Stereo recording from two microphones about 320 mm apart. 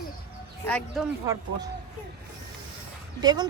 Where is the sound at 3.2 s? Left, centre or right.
Centre.